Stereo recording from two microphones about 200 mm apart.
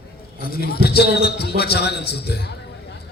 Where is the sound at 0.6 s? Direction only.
50° left (ahead or behind).